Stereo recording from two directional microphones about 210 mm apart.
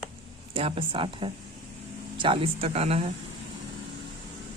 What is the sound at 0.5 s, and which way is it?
A woman's voice, 25° right (ahead or behind).